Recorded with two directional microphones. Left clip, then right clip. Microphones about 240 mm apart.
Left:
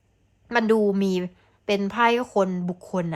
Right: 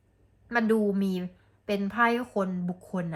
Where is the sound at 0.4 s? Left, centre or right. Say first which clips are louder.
Left 5 dB; left.